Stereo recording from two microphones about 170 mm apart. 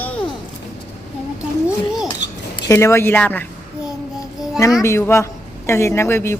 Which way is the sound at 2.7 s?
15° left (ahead or behind).